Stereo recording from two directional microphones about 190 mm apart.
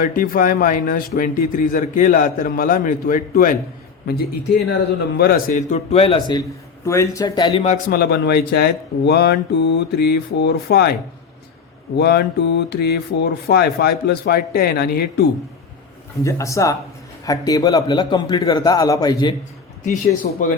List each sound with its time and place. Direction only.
0.0 s speech: 50° left (ahead or behind)
5.1 s speech: 50° left (ahead or behind); by 6.4 s 25° left (ahead or behind)
6.8 s a man's voice: 15° left (ahead or behind); by 7.8 s 30° left (ahead or behind)
7.9 s speech: 55° left (ahead or behind)
11.9 s speech: 60° left (ahead or behind)
16.2 s a man's voice: 15° left (ahead or behind)
20.2 s speech: 50° left (ahead or behind)